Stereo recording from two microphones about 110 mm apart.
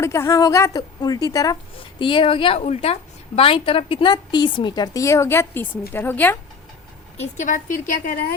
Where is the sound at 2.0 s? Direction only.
50° left (ahead or behind).